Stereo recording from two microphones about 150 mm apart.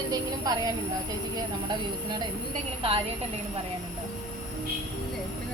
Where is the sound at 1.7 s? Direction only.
30° right (ahead or behind).